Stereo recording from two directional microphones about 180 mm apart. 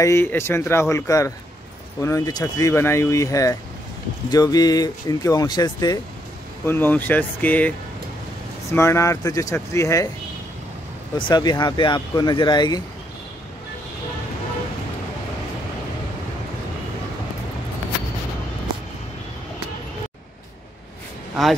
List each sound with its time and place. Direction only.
0.0 s speech: 15° left (ahead or behind)
8.7 s speech: 15° left (ahead or behind)
11.1 s speech: 25° left (ahead or behind)